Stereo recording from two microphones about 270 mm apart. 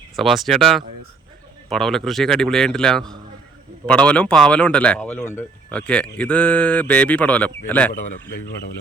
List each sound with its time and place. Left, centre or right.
0.2 s speech: centre
7.9 s speech: left